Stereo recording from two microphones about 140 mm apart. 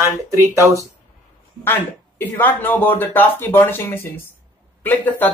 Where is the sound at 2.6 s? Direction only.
15° left (ahead or behind).